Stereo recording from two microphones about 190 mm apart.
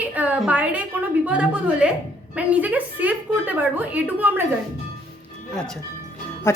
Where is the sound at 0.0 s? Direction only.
10° right (ahead or behind).